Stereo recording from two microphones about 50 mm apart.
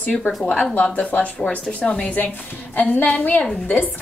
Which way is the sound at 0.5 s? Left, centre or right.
Centre.